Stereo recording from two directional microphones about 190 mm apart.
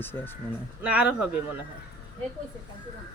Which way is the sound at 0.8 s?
5° right (ahead or behind).